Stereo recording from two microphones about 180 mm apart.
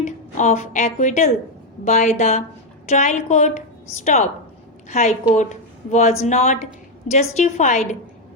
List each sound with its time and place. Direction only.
0.0 s a woman's voice: 40° left (ahead or behind)